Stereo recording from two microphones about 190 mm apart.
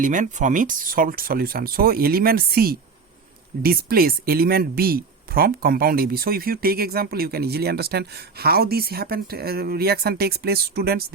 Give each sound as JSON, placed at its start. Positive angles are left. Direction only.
{"t": 0.0, "sound": "speech", "side_deg": -40}